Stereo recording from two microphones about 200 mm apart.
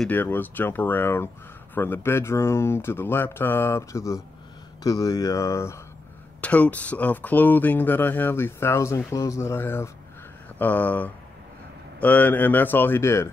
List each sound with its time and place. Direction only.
0.0 s speech: 10° left (ahead or behind)